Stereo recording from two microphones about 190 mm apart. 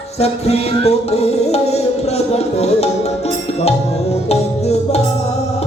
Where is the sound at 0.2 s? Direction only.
35° left (ahead or behind).